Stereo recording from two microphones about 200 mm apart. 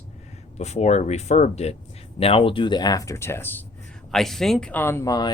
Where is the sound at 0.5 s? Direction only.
35° left (ahead or behind).